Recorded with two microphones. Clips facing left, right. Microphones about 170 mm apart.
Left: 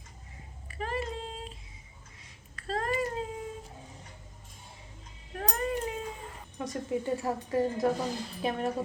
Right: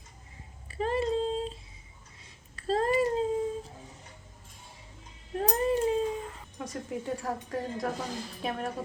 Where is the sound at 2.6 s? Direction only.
30° right (ahead or behind).